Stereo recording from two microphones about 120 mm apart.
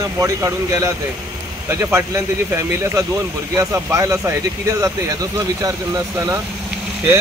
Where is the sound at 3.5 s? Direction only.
25° right (ahead or behind).